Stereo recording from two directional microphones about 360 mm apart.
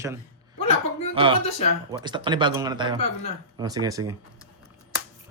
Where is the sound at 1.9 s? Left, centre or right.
Centre.